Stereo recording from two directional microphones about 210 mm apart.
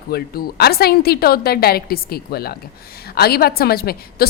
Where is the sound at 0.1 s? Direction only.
50° left (ahead or behind).